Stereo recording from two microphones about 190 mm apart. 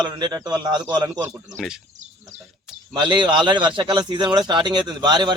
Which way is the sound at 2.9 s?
25° right (ahead or behind).